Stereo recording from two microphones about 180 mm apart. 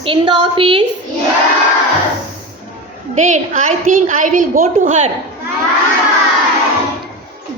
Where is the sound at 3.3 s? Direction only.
40° right (ahead or behind).